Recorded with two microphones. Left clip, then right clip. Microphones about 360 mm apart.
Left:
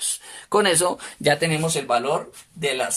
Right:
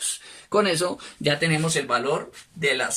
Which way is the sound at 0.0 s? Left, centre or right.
Centre.